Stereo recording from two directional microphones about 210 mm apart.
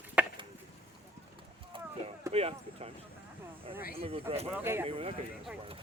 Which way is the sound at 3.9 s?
25° right (ahead or behind).